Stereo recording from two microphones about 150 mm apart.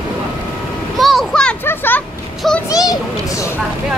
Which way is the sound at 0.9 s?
Centre (ahead or behind).